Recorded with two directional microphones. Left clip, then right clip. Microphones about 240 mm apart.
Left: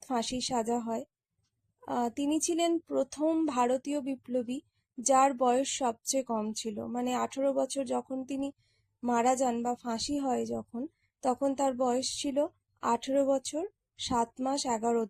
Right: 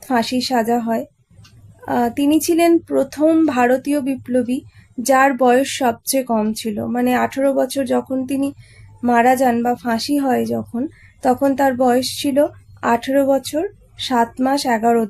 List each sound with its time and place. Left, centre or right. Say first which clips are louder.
0.0 s a woman's voice: right 14 dB; left